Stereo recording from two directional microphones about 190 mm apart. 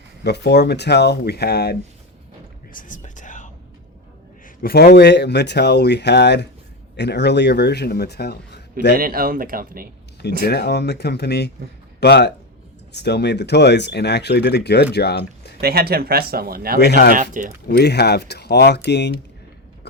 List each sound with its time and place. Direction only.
0.3 s speech: 60° left (ahead or behind)
2.7 s whispering: 45° left (ahead or behind)
4.6 s speech: 55° left (ahead or behind)
9.0 s speech: 50° right (ahead or behind)
10.4 s speech: 60° left (ahead or behind)
15.6 s speech: 55° right (ahead or behind)
16.8 s speech: 60° left (ahead or behind)
17.4 s speech: 45° right (ahead or behind)
17.7 s speech: 60° left (ahead or behind)